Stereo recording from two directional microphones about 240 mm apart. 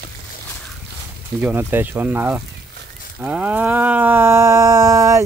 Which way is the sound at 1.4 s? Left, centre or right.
Centre.